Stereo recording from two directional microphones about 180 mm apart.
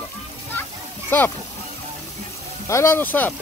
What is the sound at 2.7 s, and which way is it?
Speech, 15° left (ahead or behind).